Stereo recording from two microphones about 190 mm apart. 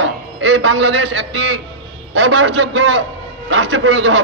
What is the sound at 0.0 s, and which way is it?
A man's voice, 65° right (ahead or behind).